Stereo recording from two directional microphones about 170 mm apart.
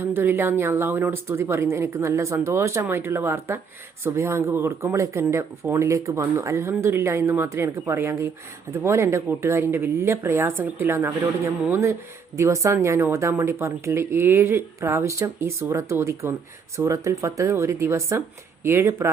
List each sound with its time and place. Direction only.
0.0 s speech: 15° right (ahead or behind)